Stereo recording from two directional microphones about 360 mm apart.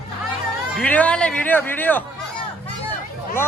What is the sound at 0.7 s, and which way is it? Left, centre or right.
Speech, centre.